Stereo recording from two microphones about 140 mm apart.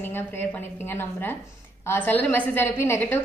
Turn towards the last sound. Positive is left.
turn(degrees=15)  # may be behind; listen again after turning